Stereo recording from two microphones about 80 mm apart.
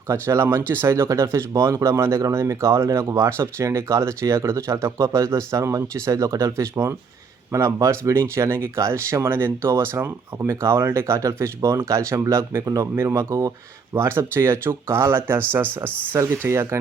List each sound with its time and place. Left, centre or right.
0.1 s speech: right
15.9 s speech: centre
16.1 s speech: right